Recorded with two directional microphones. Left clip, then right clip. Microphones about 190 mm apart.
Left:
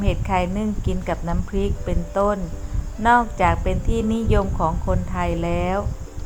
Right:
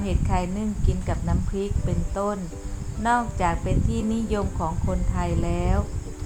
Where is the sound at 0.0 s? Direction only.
25° left (ahead or behind).